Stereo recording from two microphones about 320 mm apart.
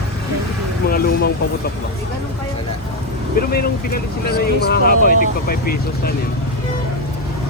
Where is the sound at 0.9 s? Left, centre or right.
Left.